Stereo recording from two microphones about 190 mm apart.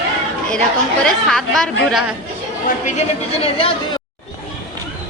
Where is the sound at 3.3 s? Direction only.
30° left (ahead or behind).